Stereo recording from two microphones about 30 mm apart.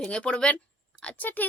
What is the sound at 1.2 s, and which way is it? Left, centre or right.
Speech, left.